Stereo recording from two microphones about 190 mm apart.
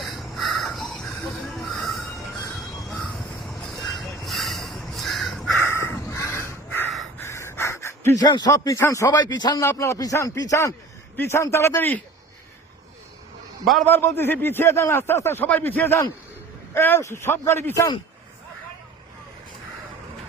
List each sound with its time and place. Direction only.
0.0 s crow: centre (ahead or behind)
1.5 s a sound: centre (ahead or behind)
3.4 s crow: centre (ahead or behind)
5.6 s crow: 15° left (ahead or behind)
7.2 s gasp: 15° left (ahead or behind)
8.2 s speech: 20° left (ahead or behind)
13.7 s speech: 5° left (ahead or behind)